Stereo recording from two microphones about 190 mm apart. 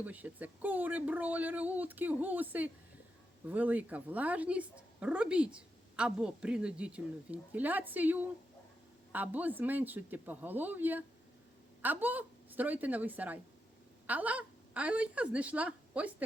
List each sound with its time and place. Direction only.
0.0 s a woman's voice: 10° right (ahead or behind)